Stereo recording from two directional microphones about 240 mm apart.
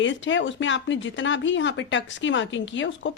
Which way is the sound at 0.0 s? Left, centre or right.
Left.